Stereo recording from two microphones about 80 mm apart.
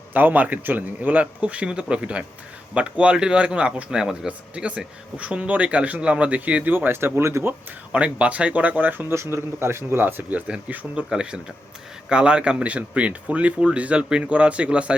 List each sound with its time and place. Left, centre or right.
0.1 s speech: right
7.9 s speech: centre